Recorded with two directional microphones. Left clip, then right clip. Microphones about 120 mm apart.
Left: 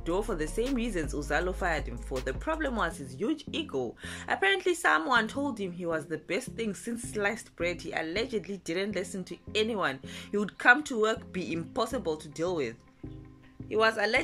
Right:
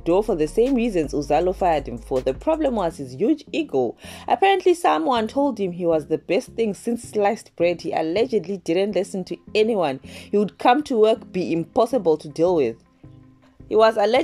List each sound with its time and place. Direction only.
0.0 s speech: 35° right (ahead or behind)